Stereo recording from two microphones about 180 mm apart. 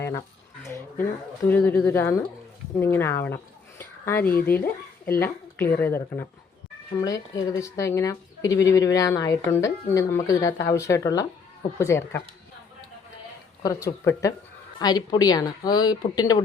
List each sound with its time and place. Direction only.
0.0 s speech: 15° left (ahead or behind)
1.5 s speech: 10° left (ahead or behind)
13.8 s speech: 15° left (ahead or behind)